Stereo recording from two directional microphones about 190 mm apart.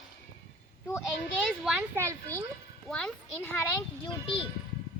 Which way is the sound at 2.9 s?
5° left (ahead or behind).